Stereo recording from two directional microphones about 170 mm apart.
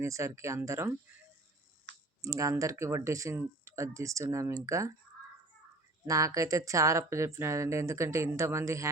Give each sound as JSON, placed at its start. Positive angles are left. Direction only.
{"t": 0.0, "sound": "speech", "side_deg": -15}
{"t": 2.2, "sound": "speech", "side_deg": -20}
{"t": 6.1, "sound": "speech", "side_deg": -20}